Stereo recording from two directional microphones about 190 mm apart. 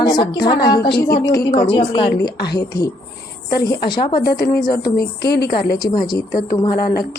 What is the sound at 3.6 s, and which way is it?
Speech, 25° left (ahead or behind).